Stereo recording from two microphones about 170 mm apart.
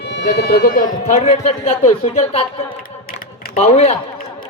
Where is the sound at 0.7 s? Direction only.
50° left (ahead or behind); by 2.4 s 35° left (ahead or behind).